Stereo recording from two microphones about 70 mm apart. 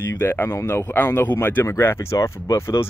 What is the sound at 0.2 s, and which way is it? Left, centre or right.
Speech, left.